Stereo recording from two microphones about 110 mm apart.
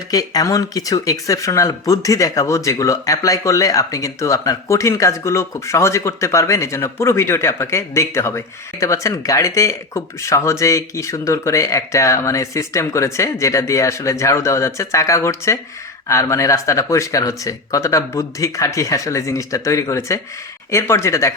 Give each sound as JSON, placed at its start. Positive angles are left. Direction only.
{"t": 0.1, "sound": "speech", "side_deg": 35}